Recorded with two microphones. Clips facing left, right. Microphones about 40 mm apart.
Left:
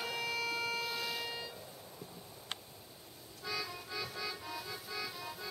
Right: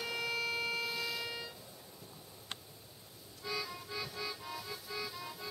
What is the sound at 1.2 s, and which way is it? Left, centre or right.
Vehicle, centre.